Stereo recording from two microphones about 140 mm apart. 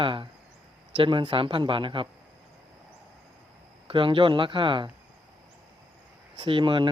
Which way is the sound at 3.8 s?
35° right (ahead or behind).